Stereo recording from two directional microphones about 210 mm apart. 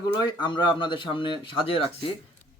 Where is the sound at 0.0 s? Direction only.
20° left (ahead or behind).